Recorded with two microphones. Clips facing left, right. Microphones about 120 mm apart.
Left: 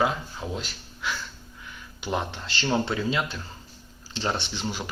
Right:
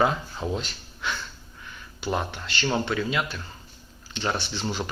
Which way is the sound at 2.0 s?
20° left (ahead or behind).